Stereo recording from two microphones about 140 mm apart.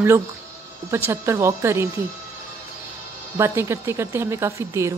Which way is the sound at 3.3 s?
20° right (ahead or behind).